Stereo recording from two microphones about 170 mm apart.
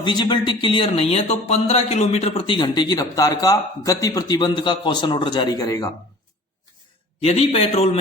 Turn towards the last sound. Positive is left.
turn(degrees=35)  # may be behind; listen again after turning